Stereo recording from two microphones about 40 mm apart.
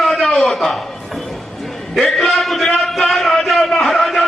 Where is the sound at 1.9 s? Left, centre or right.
Centre.